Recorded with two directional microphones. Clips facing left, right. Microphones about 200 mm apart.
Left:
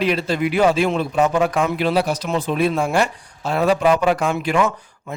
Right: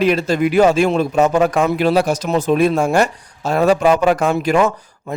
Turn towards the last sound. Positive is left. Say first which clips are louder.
# right 4 dB
turn(degrees=-40)  # may be behind; listen again after turning